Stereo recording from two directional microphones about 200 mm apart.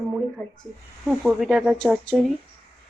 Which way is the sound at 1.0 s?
Centre (ahead or behind).